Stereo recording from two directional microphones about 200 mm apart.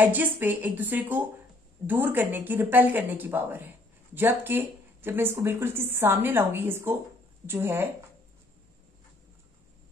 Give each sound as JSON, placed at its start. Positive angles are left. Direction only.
{"t": 0.0, "sound": "speech", "side_deg": -10}